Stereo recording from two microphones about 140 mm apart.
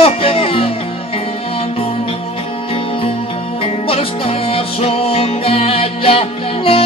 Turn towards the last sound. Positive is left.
turn(degrees=45)  # may be behind; listen again after turning